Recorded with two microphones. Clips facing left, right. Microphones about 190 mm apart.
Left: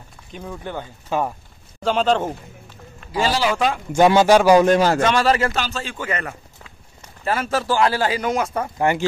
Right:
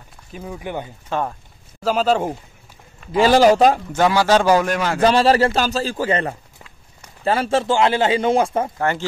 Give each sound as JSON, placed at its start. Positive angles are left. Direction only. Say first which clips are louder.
{"t": 0.3, "sound": "speech", "louder": "right 2 dB", "side_deg": -5}
{"t": 1.1, "sound": "speech", "louder": "left 1 dB", "side_deg": 10}
{"t": 1.8, "sound": "speech", "louder": "right 1 dB", "side_deg": -5}
{"t": 3.3, "sound": "a man's voice", "louder": "right 8 dB", "side_deg": -45}
{"t": 3.9, "sound": "speech", "louder": "left 3 dB", "side_deg": 20}
{"t": 4.6, "sound": "speech", "louder": "left 6 dB", "side_deg": 35}
{"t": 5.0, "sound": "a man's voice", "louder": "right 4 dB", "side_deg": -35}
{"t": 8.7, "sound": "speech", "louder": "left 2 dB", "side_deg": 15}